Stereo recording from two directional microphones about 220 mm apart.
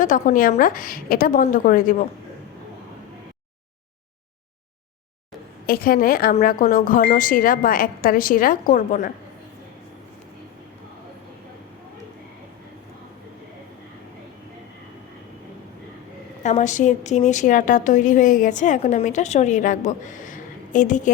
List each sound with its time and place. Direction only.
0.0 s a woman's voice: 35° left (ahead or behind)
5.6 s a woman's voice: 40° left (ahead or behind)
16.4 s a woman's voice: 30° left (ahead or behind)